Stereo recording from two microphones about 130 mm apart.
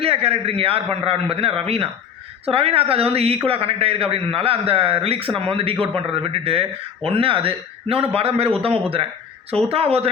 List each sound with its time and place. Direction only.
0.0 s a man's voice: 50° right (ahead or behind)